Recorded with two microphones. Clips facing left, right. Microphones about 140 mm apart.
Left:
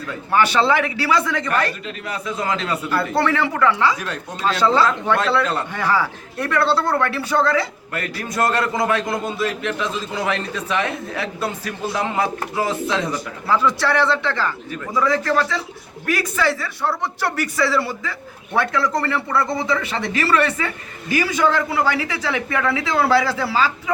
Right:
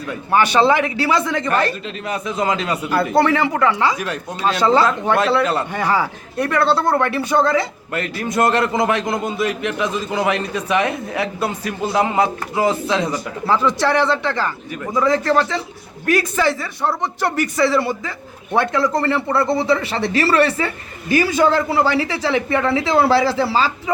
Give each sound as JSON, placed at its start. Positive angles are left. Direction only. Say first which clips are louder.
{"t": 0.1, "sound": "speech", "louder": "right 2 dB", "side_deg": -15}